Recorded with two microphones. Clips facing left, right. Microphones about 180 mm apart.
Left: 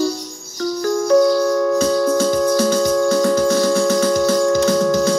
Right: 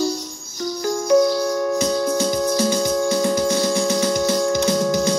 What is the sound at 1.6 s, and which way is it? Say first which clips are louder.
Music: left 4 dB; 20° right (ahead or behind).